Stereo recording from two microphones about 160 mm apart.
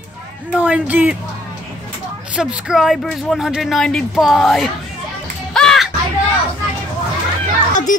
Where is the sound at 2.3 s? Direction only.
5° right (ahead or behind).